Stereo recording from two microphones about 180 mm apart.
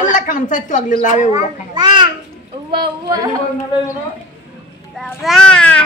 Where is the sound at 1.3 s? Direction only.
25° right (ahead or behind).